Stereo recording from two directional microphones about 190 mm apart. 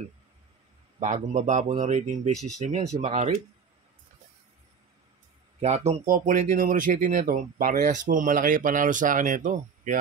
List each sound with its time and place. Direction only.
0.9 s speech: 40° right (ahead or behind)
2.3 s speech: centre (ahead or behind)
2.6 s speech: 40° right (ahead or behind)
5.6 s speech: 35° right (ahead or behind)